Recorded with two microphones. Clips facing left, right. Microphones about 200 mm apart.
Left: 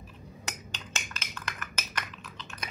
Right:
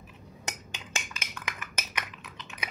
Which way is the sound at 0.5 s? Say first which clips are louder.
Right 2 dB; 15° right (ahead or behind).